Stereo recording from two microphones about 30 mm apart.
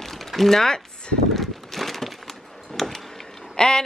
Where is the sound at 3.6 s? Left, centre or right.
Left.